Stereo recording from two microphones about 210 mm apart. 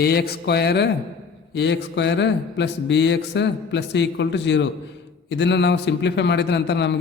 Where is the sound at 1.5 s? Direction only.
55° left (ahead or behind).